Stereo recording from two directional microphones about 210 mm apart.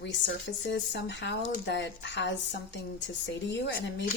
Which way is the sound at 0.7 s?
55° left (ahead or behind).